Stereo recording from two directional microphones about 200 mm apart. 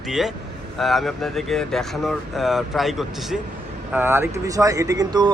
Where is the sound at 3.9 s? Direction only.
10° right (ahead or behind).